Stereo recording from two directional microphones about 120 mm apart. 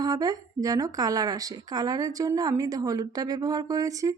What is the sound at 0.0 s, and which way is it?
A woman's voice, 30° right (ahead or behind).